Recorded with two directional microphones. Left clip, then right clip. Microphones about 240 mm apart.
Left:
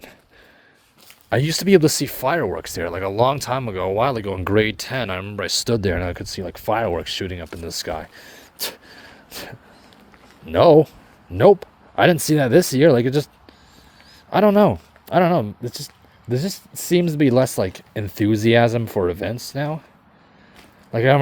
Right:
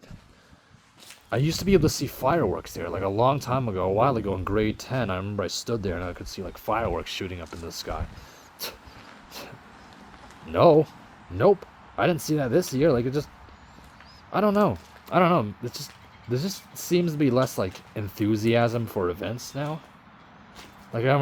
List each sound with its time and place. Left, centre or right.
1.3 s speech: left
10.5 s speech: left
20.9 s speech: left